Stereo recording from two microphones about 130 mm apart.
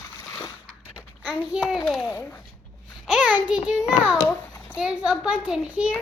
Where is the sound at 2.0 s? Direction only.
20° left (ahead or behind).